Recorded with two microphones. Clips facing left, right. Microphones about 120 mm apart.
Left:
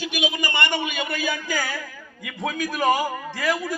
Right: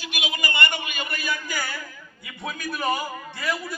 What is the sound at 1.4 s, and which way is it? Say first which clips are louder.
A man's voice: left 4 dB; 90° left.